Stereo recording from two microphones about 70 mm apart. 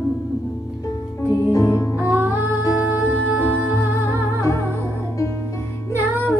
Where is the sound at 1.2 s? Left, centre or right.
Left.